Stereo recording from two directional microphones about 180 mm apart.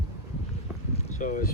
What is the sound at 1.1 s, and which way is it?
Speech, 45° left (ahead or behind).